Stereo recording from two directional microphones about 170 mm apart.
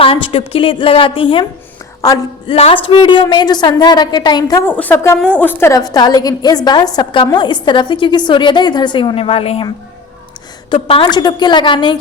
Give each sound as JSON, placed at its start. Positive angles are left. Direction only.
{"t": 0.0, "sound": "a woman's voice", "side_deg": 30}
{"t": 2.5, "sound": "a woman's voice", "side_deg": 35}
{"t": 10.7, "sound": "a woman's voice", "side_deg": 30}